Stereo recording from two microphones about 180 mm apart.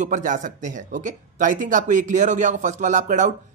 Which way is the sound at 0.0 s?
45° right (ahead or behind).